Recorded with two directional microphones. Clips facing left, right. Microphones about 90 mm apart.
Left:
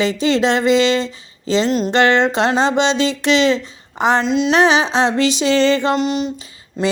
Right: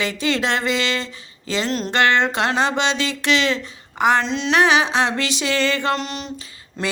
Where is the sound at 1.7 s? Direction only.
5° left (ahead or behind).